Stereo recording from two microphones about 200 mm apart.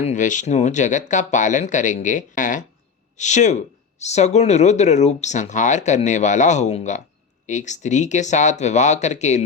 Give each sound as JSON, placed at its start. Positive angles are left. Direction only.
{"t": 0.0, "sound": "speech", "side_deg": 35}